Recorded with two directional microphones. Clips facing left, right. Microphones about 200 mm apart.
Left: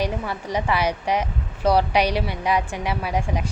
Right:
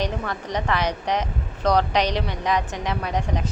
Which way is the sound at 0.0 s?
10° left (ahead or behind).